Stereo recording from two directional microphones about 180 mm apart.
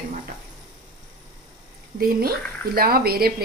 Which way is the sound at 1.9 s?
55° right (ahead or behind).